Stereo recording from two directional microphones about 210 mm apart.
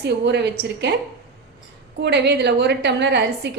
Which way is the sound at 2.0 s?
55° right (ahead or behind).